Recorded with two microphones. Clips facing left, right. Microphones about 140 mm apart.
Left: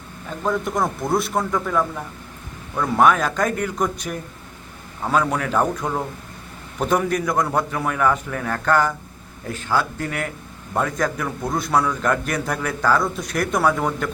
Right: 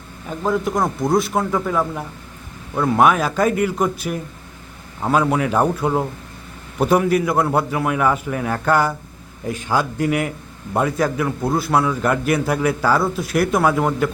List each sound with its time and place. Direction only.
0.3 s a man's voice: 5° right (ahead or behind)